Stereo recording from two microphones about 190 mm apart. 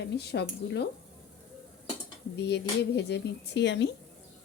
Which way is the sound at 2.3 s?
65° left (ahead or behind).